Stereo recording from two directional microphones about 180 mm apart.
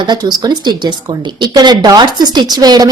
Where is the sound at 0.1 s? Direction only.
25° right (ahead or behind).